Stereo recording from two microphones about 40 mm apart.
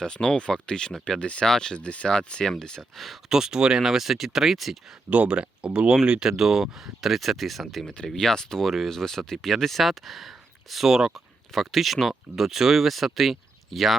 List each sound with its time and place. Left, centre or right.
0.0 s speech: centre
1.5 s speech: centre
1.8 s speech: left
2.9 s speech: centre
3.2 s speech: centre
5.0 s speech: right
5.3 s speech: right; by 7.9 s centre
7.9 s speech: centre
8.6 s speech: centre
8.9 s speech: centre
10.8 s speech: centre
11.5 s speech: centre